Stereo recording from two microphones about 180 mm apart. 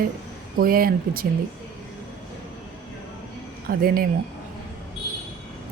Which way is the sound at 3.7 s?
55° right (ahead or behind).